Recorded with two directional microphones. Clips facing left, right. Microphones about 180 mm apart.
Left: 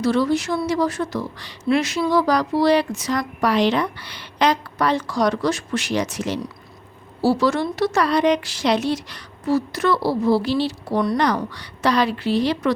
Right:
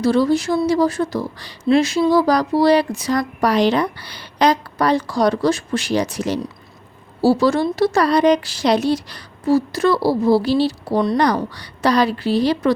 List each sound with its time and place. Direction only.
0.0 s a woman's voice: 35° right (ahead or behind)